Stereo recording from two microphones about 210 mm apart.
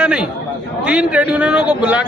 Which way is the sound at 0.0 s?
5° right (ahead or behind).